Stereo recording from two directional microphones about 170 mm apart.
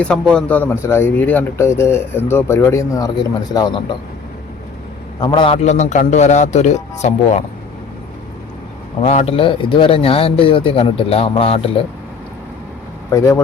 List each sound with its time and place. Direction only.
0.0 s a man's voice: 5° left (ahead or behind); by 3.8 s 25° left (ahead or behind)
5.2 s a man's voice: 30° left (ahead or behind)
9.0 s speech: 40° left (ahead or behind)
13.1 s speech: 20° left (ahead or behind)